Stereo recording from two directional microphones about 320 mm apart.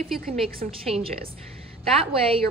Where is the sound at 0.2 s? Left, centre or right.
Right.